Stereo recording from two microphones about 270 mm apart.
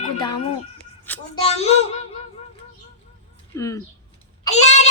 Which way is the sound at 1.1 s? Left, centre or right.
Centre.